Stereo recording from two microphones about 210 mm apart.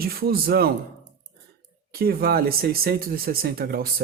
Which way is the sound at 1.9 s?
45° right (ahead or behind).